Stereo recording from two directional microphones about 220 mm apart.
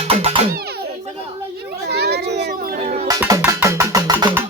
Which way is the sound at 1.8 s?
45° right (ahead or behind).